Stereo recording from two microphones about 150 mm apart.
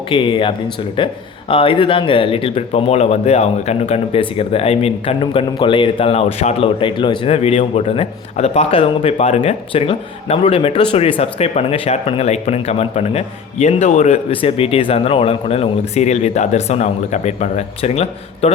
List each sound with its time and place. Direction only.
0.1 s speech: 35° left (ahead or behind); by 14.2 s 50° left (ahead or behind)
14.3 s speech: 40° left (ahead or behind)